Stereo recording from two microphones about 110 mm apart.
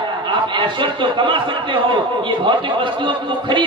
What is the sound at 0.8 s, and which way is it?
Speech, 50° right (ahead or behind).